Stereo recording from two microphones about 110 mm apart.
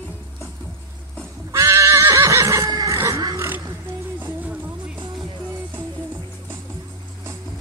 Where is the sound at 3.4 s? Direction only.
25° right (ahead or behind).